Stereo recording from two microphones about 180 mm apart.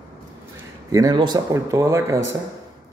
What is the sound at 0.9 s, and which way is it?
Speech, 20° right (ahead or behind).